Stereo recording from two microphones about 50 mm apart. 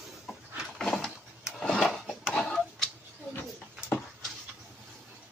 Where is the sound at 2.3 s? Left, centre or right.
Centre.